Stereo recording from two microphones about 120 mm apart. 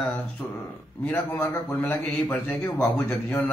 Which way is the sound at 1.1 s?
15° left (ahead or behind).